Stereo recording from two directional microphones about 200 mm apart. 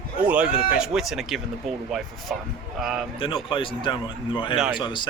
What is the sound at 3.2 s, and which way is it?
Speech, 25° left (ahead or behind).